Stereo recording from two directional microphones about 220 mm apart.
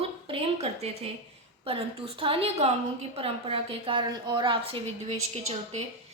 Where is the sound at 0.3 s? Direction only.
25° right (ahead or behind).